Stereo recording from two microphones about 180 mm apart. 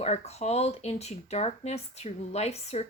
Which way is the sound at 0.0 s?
35° left (ahead or behind).